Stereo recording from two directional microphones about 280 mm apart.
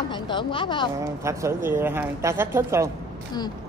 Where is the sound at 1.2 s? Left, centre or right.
Centre.